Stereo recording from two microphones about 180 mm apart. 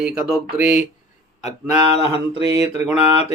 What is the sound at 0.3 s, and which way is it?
Speech, 5° right (ahead or behind).